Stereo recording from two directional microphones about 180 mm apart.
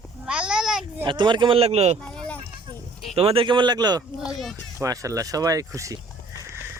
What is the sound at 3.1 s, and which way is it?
Speech, 30° right (ahead or behind).